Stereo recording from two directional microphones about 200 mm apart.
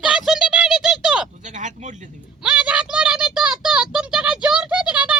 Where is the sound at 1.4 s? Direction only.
40° right (ahead or behind).